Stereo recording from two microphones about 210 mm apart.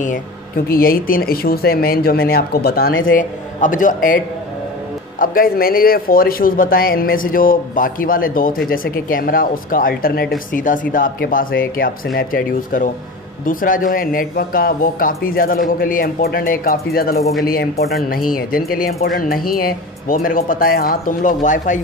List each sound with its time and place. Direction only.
0.7 s a man's voice: 45° left (ahead or behind)
5.2 s a man's voice: 45° left (ahead or behind)